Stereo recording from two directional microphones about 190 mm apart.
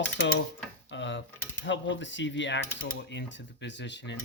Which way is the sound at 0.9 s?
75° left (ahead or behind).